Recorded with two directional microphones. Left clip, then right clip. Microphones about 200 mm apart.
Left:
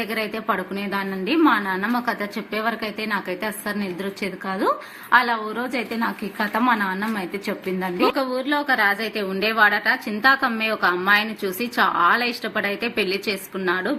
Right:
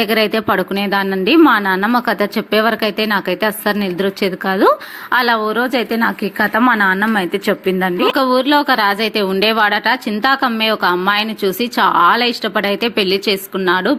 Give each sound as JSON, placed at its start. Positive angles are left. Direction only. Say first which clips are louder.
{"t": 0.0, "sound": "a woman's voice", "louder": "right 11 dB", "side_deg": -50}